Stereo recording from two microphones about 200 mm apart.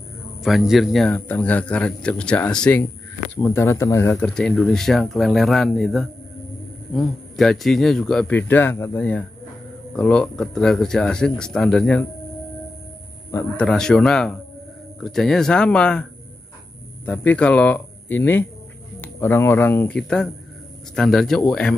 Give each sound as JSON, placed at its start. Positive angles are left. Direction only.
{"t": 0.4, "sound": "speech", "side_deg": 0}
{"t": 13.3, "sound": "speech", "side_deg": 10}